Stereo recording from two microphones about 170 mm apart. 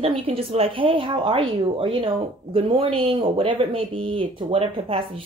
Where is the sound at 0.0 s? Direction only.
35° right (ahead or behind).